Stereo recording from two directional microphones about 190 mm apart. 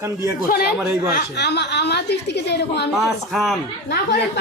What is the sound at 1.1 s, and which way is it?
A woman's voice, 65° left (ahead or behind).